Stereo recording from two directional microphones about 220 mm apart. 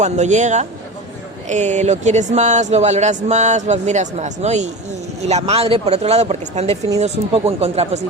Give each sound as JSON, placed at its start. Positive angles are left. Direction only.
{"t": 0.0, "sound": "speech", "side_deg": -30}